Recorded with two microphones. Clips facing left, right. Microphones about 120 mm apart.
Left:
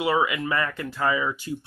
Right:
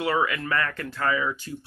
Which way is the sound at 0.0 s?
10° left (ahead or behind).